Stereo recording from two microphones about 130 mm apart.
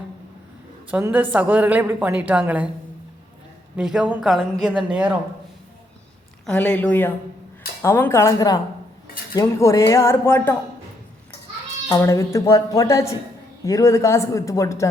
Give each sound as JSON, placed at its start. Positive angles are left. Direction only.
{"t": 1.0, "sound": "a woman's voice", "side_deg": -10}
{"t": 3.8, "sound": "a woman's voice", "side_deg": -5}
{"t": 6.4, "sound": "a woman's voice", "side_deg": 10}
{"t": 11.9, "sound": "a woman's voice", "side_deg": 25}